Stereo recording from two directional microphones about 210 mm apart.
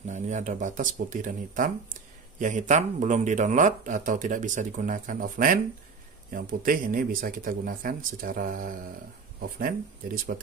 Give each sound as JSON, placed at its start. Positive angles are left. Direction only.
{"t": 0.0, "sound": "speech", "side_deg": -35}